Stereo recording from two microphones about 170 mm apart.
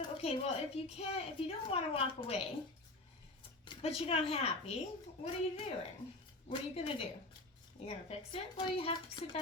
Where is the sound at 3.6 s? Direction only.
35° left (ahead or behind).